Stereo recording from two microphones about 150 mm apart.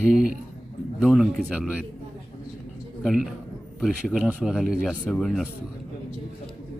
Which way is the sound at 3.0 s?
Centre (ahead or behind).